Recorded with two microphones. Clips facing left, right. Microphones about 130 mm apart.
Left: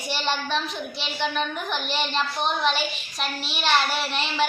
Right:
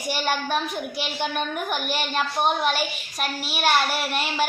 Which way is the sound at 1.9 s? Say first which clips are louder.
Even; 10° right (ahead or behind).